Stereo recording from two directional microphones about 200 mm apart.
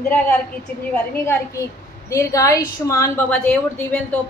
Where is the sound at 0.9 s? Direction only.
10° left (ahead or behind).